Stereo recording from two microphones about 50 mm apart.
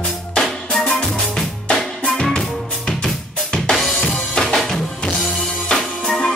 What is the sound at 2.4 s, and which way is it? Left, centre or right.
Music, centre.